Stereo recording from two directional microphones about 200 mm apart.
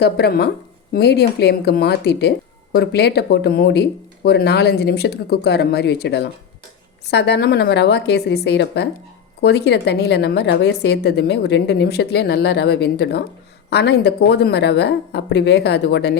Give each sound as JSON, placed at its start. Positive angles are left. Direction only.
{"t": 0.0, "sound": "a woman's voice", "side_deg": 55}